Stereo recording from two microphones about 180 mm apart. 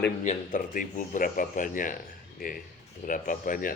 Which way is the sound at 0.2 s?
45° left (ahead or behind).